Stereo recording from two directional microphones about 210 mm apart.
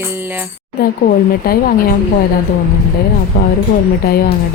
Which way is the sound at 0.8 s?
45° left (ahead or behind).